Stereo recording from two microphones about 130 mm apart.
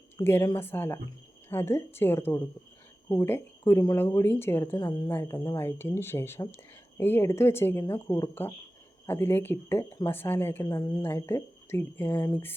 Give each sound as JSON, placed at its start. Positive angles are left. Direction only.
{"t": 0.3, "sound": "speech", "side_deg": 20}
{"t": 10.7, "sound": "speech", "side_deg": 30}